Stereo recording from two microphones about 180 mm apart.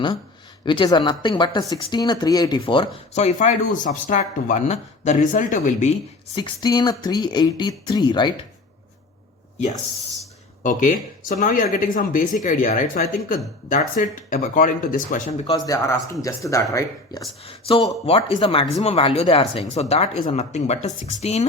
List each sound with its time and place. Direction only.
0.6 s speech: 25° left (ahead or behind); by 5.9 s 45° left (ahead or behind)
6.3 s speech: 25° left (ahead or behind)
10.6 s speech: 45° left (ahead or behind)
15.4 s speech: 25° left (ahead or behind)
17.4 s speech: 30° left (ahead or behind)